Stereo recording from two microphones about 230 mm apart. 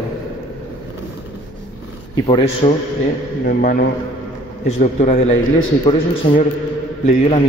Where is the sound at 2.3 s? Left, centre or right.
Left.